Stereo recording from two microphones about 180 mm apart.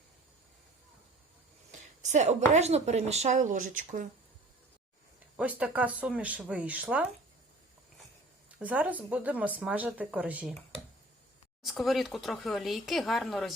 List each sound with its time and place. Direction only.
2.0 s speech: 40° right (ahead or behind)
5.4 s speech: 5° right (ahead or behind)
8.5 s speech: 10° right (ahead or behind)
11.6 s speech: centre (ahead or behind)